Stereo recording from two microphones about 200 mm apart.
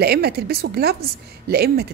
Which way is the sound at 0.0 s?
55° right (ahead or behind).